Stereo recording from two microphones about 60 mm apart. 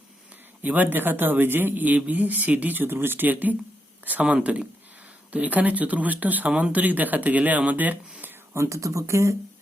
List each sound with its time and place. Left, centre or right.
0.6 s speech: right
8.5 s speech: right